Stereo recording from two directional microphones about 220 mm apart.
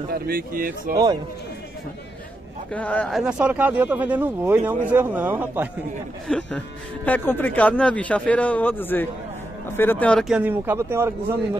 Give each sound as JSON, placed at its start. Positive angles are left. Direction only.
{"t": 0.1, "sound": "speech", "side_deg": -40}
{"t": 2.7, "sound": "speech", "side_deg": 5}
{"t": 6.2, "sound": "speech", "side_deg": 5}